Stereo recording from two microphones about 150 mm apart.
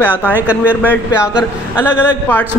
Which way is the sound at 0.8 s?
10° left (ahead or behind).